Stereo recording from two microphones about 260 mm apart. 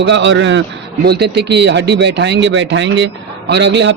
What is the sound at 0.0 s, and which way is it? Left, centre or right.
A man's voice, right.